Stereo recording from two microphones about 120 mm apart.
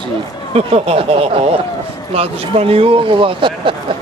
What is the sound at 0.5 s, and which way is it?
Speech, 55° right (ahead or behind).